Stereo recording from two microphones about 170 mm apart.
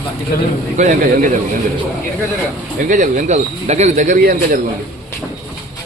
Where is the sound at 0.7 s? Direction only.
50° right (ahead or behind).